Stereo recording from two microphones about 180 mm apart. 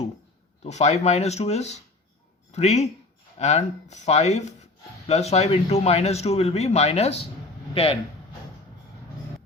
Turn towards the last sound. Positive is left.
turn(degrees=30)  # may be behind; listen again after turning